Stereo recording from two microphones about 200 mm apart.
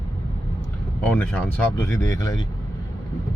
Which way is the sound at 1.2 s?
10° left (ahead or behind).